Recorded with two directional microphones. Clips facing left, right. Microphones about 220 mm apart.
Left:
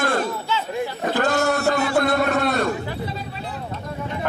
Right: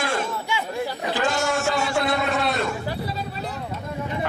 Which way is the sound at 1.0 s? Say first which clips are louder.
Left 5 dB; 55° left (ahead or behind).